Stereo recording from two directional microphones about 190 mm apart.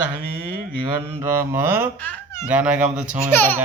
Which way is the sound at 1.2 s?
10° right (ahead or behind).